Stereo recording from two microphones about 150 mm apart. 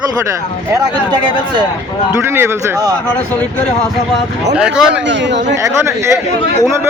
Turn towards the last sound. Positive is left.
turn(degrees=-5)  # may be behind; listen again after turning